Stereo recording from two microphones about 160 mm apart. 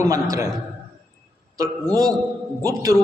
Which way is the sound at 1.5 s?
25° right (ahead or behind).